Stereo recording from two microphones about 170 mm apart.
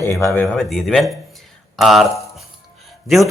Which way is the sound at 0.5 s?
Centre (ahead or behind).